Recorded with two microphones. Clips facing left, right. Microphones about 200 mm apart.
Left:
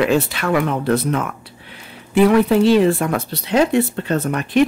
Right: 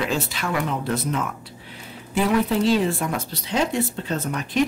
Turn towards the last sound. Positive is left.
turn(degrees=65)  # may be behind; listen again after turning